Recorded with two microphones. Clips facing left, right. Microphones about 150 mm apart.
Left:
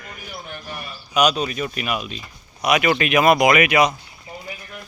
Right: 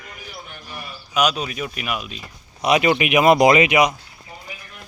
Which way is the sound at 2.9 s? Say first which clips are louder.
Right 1 dB; 15° right (ahead or behind).